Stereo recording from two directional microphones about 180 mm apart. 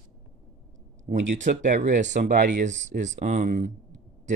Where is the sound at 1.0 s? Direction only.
40° right (ahead or behind).